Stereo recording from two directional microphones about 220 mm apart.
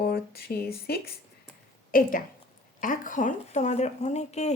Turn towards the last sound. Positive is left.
turn(degrees=30)  # may be behind; listen again after turning